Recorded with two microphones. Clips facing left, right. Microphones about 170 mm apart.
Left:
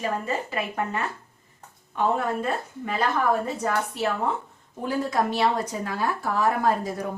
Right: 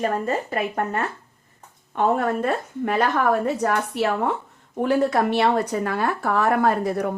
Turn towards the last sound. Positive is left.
turn(degrees=-65)  # may be behind; listen again after turning